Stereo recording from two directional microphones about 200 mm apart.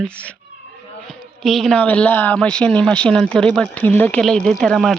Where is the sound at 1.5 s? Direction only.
Centre (ahead or behind).